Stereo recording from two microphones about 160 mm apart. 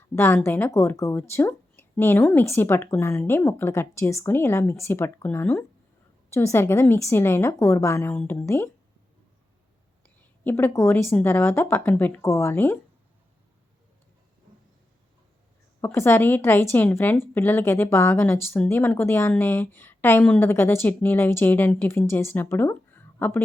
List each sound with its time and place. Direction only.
0.2 s a woman's voice: 15° left (ahead or behind)
10.2 s a woman's voice: 10° left (ahead or behind)
15.8 s a woman's voice: 15° left (ahead or behind)